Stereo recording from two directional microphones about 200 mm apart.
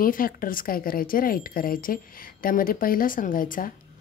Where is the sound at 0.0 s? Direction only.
45° left (ahead or behind).